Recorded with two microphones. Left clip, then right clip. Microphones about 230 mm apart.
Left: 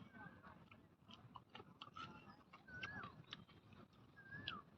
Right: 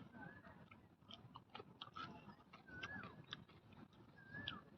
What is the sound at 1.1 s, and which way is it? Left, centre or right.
Biting, centre.